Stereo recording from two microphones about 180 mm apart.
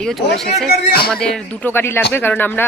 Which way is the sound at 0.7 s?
60° left (ahead or behind).